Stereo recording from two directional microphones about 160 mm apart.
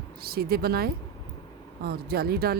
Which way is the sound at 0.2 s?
70° right (ahead or behind).